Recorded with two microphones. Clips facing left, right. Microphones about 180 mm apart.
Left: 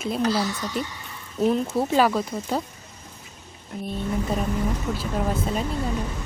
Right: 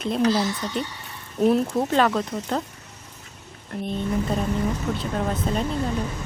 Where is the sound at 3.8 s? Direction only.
5° left (ahead or behind).